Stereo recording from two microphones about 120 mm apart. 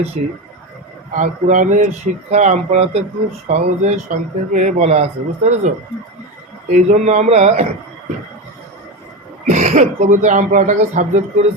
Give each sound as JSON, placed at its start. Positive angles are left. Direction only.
{"t": 0.2, "sound": "speech", "side_deg": -90}
{"t": 6.7, "sound": "speech", "side_deg": -85}
{"t": 9.5, "sound": "speech", "side_deg": -80}